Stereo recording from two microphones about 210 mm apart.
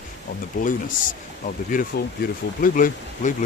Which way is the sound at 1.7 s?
40° left (ahead or behind).